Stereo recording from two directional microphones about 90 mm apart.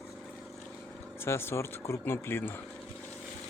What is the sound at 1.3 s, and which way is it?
Speech, 30° left (ahead or behind).